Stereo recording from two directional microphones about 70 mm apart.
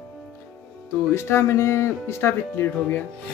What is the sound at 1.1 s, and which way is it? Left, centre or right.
Speech, left.